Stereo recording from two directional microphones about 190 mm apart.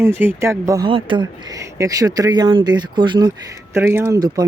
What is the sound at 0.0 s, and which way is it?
Speech, 10° right (ahead or behind).